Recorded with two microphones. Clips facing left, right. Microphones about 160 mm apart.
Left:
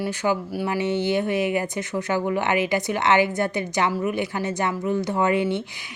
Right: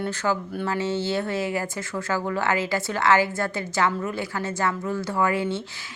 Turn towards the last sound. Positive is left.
turn(degrees=20)  # may be behind; listen again after turning